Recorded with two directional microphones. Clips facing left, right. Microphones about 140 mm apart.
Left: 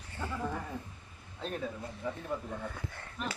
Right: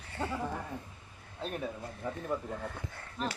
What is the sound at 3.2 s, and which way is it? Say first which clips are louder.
Speech: right 3 dB; 35° right (ahead or behind).